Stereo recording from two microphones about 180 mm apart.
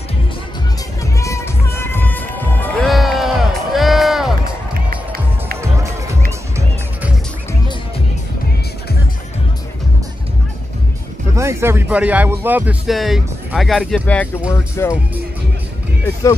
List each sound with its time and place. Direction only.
1.2 s music: 15° left (ahead or behind)
2.9 s a sound: centre (ahead or behind)
4.8 s music: 55° right (ahead or behind)
5.6 s music: 15° right (ahead or behind)
11.3 s speech: 15° right (ahead or behind); by 15.0 s 15° left (ahead or behind)